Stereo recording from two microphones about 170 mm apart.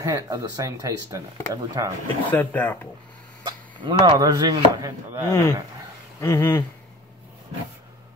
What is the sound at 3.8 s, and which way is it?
Speech, 25° right (ahead or behind).